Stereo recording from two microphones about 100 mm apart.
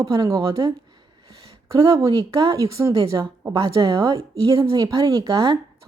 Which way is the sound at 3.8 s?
50° right (ahead or behind).